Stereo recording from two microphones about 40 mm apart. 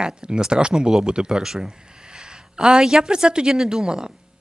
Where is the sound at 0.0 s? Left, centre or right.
Centre.